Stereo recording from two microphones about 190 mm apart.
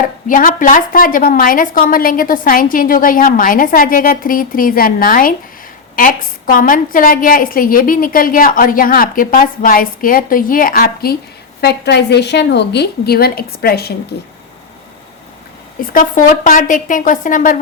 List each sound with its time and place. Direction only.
0.3 s a woman's voice: 45° left (ahead or behind)
15.9 s a woman's voice: 45° left (ahead or behind)